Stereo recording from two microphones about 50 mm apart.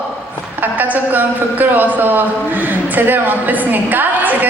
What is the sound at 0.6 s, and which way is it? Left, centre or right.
A man's voice, right.